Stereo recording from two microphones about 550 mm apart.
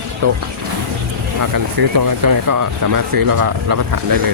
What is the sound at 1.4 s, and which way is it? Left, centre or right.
Speech, right.